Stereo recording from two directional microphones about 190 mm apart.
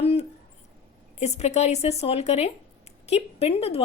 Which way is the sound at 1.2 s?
35° left (ahead or behind).